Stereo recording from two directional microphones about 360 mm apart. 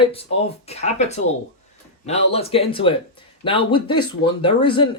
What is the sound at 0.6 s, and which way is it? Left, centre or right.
Speech, centre.